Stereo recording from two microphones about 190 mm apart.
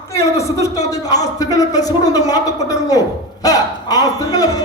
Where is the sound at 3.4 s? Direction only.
20° left (ahead or behind).